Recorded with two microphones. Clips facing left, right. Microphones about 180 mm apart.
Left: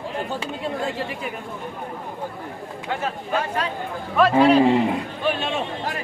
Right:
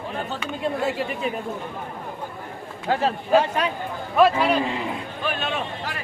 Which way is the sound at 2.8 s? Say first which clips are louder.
Right 5 dB; 30° right (ahead or behind).